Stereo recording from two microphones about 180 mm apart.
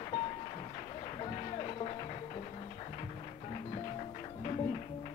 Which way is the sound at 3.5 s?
30° left (ahead or behind).